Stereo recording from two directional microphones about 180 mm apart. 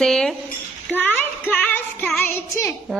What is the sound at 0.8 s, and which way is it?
Child singing, 10° left (ahead or behind).